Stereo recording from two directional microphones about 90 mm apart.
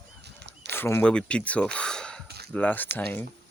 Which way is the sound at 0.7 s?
25° left (ahead or behind).